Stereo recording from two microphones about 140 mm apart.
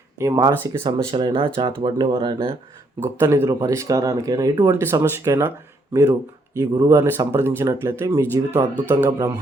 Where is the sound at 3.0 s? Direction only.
20° right (ahead or behind).